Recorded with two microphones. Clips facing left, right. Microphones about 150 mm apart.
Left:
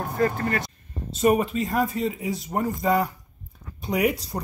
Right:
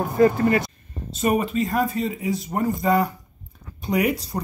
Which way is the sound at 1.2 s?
5° left (ahead or behind).